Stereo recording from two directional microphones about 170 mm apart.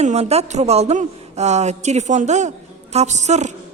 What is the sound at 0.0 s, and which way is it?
A woman's voice, 40° right (ahead or behind).